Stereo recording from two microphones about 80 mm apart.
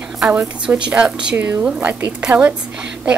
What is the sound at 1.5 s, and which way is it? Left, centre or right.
Speech, right.